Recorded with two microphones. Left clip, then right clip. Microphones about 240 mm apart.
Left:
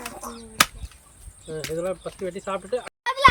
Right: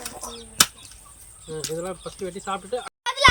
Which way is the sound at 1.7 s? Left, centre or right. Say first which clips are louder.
Left 3 dB; centre.